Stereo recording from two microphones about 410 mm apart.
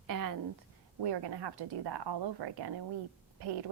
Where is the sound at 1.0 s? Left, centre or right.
Right.